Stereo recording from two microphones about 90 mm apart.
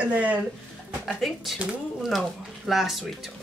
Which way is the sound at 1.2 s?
Centre (ahead or behind).